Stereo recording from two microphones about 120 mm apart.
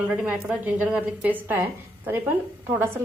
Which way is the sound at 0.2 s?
10° right (ahead or behind).